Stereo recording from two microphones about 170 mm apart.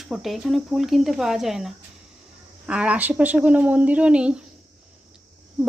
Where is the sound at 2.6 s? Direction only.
5° right (ahead or behind).